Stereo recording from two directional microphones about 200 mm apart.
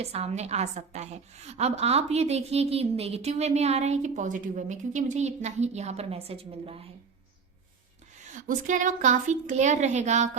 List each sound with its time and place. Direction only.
0.0 s a woman's voice: 30° right (ahead or behind)
8.3 s a woman's voice: 40° right (ahead or behind)